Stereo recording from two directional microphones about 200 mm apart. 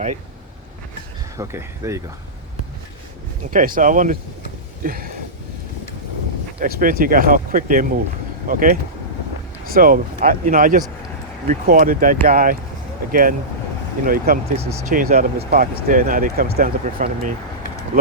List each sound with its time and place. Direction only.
1.4 s speech: 15° right (ahead or behind)
3.5 s speech: 45° right (ahead or behind)
4.8 s a sound: 45° right (ahead or behind)
6.6 s speech: 45° right (ahead or behind)
14.6 s speech: 15° right (ahead or behind)
14.8 s speech: 45° right (ahead or behind)